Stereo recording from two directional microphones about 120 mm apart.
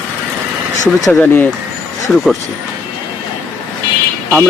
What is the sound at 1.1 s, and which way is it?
Speech, 20° left (ahead or behind).